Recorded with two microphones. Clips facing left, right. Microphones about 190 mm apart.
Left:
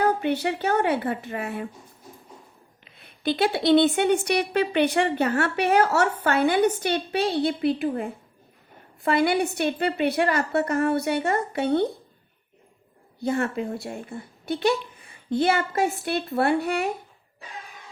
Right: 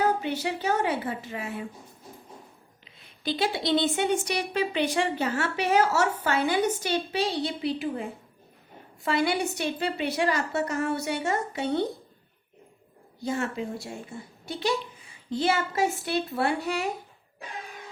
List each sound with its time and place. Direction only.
0.0 s a woman's voice: 60° left (ahead or behind)
2.8 s a woman's voice: 60° left (ahead or behind)
13.2 s a woman's voice: 55° left (ahead or behind)